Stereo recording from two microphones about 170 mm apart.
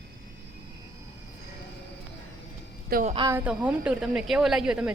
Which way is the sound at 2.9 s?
45° right (ahead or behind).